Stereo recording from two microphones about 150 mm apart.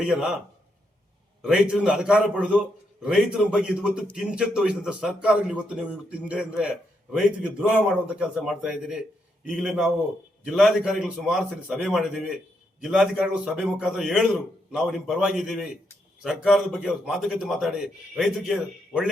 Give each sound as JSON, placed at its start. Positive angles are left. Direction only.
{"t": 0.0, "sound": "a man's voice", "side_deg": -5}
{"t": 1.4, "sound": "a man's voice", "side_deg": -5}